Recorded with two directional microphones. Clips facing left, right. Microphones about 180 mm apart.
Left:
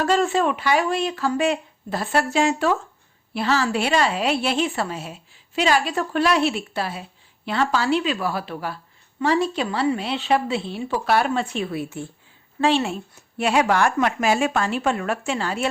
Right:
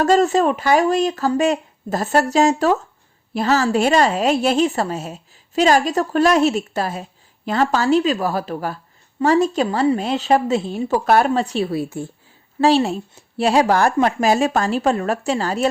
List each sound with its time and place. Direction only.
0.0 s a woman's voice: 40° right (ahead or behind)